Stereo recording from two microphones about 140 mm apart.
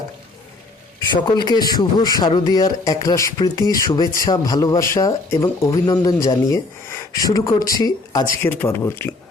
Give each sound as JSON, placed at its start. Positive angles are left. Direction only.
{"t": 0.9, "sound": "a man's voice", "side_deg": 30}
{"t": 8.4, "sound": "speech", "side_deg": 15}